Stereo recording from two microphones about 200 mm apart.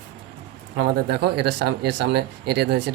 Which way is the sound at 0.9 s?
55° right (ahead or behind).